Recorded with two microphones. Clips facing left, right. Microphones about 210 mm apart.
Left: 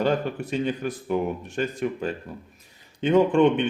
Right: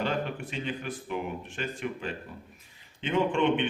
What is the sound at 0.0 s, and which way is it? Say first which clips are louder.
A man's voice: left 7 dB; 45° left (ahead or behind).